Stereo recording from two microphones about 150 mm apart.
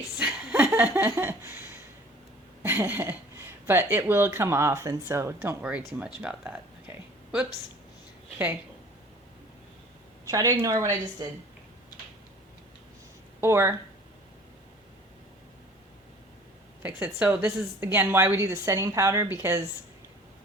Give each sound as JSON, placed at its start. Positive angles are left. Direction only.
{"t": 0.2, "sound": "a sound", "side_deg": -10}
{"t": 2.6, "sound": "speech", "side_deg": -15}
{"t": 10.2, "sound": "a woman's voice", "side_deg": -20}
{"t": 13.4, "sound": "a woman's voice", "side_deg": -15}
{"t": 16.8, "sound": "a woman's voice", "side_deg": -10}